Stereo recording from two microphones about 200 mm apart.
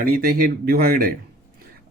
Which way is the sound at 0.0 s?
45° right (ahead or behind).